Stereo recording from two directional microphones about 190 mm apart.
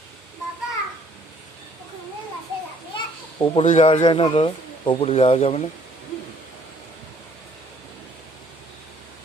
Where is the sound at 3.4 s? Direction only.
30° left (ahead or behind).